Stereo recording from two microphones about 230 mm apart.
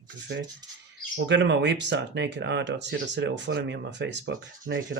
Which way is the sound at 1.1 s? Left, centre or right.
Right.